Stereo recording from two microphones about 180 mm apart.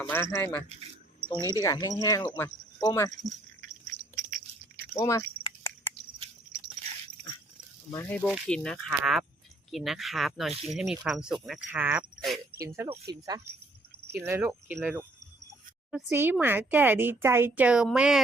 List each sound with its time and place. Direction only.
0.0 s speech: 10° left (ahead or behind)
1.4 s speech: 15° right (ahead or behind)
1.6 s speech: 20° left (ahead or behind)
3.1 s speech: 45° right (ahead or behind)
4.1 s a sound: 50° right (ahead or behind)
4.9 s speech: 15° left (ahead or behind)
5.4 s cricket: 15° left (ahead or behind)
7.9 s speech: 5° left (ahead or behind)
12.6 s speech: 15° right (ahead or behind)